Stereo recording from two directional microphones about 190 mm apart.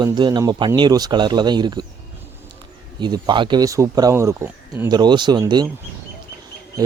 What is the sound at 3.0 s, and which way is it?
Speech, 25° right (ahead or behind).